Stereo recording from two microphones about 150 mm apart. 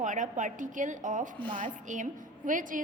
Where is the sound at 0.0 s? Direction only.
55° right (ahead or behind).